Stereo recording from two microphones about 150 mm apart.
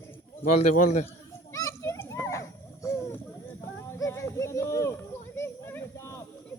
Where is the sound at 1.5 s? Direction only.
20° left (ahead or behind).